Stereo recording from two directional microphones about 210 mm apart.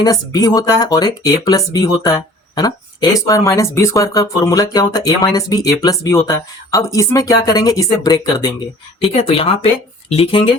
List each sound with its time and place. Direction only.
0.0 s speech: 20° left (ahead or behind)